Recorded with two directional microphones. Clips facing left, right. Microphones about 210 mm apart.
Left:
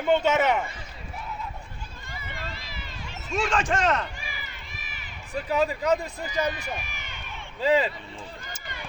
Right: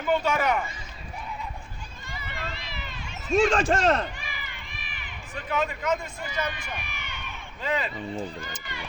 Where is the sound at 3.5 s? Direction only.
35° right (ahead or behind).